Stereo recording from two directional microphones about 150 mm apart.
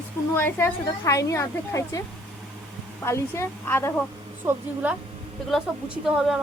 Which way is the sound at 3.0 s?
15° left (ahead or behind).